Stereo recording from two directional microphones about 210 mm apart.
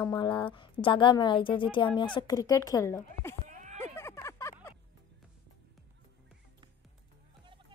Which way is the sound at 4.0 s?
15° left (ahead or behind).